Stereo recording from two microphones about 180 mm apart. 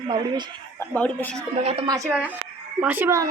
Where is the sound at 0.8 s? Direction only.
10° left (ahead or behind).